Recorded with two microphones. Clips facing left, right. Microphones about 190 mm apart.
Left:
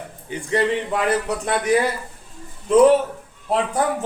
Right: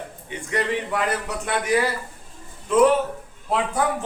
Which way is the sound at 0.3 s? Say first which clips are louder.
Left 5 dB; 30° left (ahead or behind).